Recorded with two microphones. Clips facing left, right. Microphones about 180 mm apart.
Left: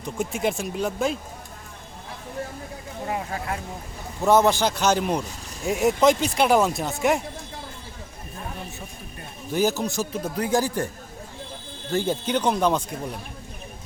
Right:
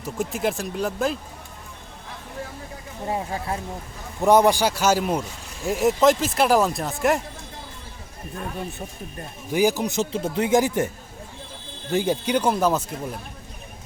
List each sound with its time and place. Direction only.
0.0 s speech: centre (ahead or behind)
3.1 s speech: 30° right (ahead or behind)
4.2 s speech: 15° right (ahead or behind)
9.5 s speech: 15° right (ahead or behind)
11.9 s speech: 15° right (ahead or behind)